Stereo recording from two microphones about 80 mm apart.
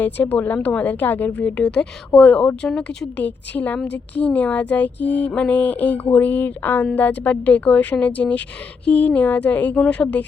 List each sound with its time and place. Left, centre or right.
0.0 s a woman's voice: left